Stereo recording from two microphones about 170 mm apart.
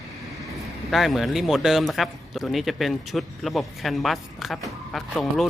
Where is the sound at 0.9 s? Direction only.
Centre (ahead or behind).